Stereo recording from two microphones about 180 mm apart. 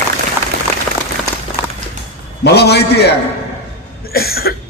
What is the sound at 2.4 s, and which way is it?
Speech, 65° left (ahead or behind).